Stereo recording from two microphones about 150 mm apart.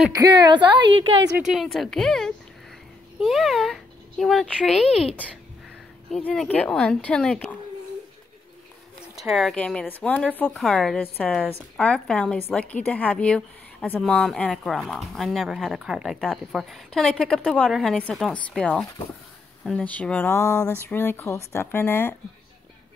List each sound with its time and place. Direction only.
0.1 s a woman's voice: 25° right (ahead or behind)
1.4 s speech: centre (ahead or behind)
9.1 s a woman's voice: centre (ahead or behind); by 22.1 s 15° left (ahead or behind)